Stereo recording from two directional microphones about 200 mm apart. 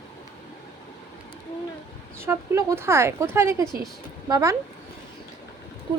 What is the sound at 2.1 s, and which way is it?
Speech, 15° right (ahead or behind).